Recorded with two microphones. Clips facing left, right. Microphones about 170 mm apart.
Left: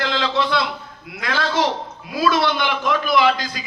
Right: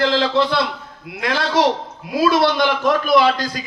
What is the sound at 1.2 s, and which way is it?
A man's voice, 60° right (ahead or behind).